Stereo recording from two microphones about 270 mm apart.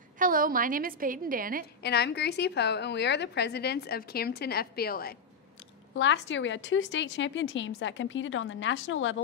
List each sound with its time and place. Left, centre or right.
0.2 s a woman's voice: right
1.8 s a woman's voice: left